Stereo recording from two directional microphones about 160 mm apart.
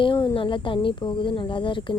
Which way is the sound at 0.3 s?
30° left (ahead or behind).